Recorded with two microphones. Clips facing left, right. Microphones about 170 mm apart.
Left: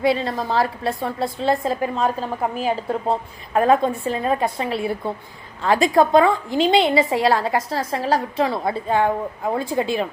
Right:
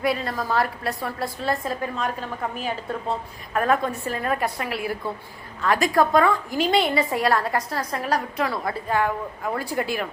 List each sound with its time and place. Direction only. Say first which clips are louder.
0.0 s a woman's voice: left 4 dB; 25° left (ahead or behind)